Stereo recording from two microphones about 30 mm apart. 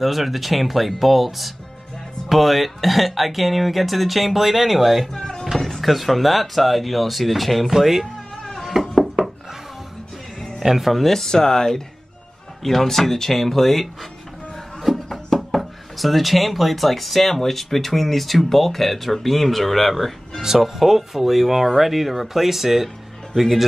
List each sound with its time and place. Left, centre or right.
0.0 s speech: centre
5.1 s a sound: left
5.6 s speech: centre
8.8 s a sound: centre
9.2 s wood: centre
10.6 s speech: centre
10.9 s speech: centre
14.8 s music: centre
15.3 s speech: centre
20.4 s speech: centre